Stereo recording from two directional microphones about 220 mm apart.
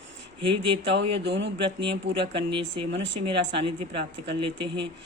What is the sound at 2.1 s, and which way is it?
Speech, 25° right (ahead or behind).